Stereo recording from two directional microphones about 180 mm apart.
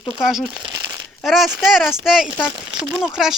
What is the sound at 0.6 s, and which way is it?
Crumpling, 20° right (ahead or behind).